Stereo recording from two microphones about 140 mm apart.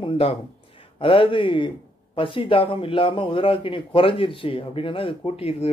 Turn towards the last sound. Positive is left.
turn(degrees=45)  # may be behind; listen again after turning